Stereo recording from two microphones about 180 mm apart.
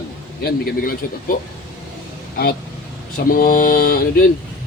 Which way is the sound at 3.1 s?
50° left (ahead or behind).